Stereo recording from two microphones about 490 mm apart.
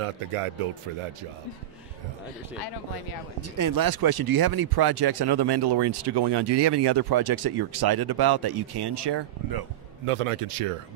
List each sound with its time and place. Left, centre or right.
0.0 s speech: right
3.3 s speech: right
10.0 s speech: right